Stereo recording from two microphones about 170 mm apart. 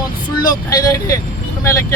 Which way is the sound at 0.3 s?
25° left (ahead or behind).